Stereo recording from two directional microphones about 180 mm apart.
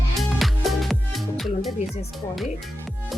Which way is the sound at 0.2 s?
Centre (ahead or behind).